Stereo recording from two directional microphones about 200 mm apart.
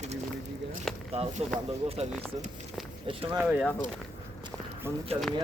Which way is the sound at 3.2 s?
5° right (ahead or behind).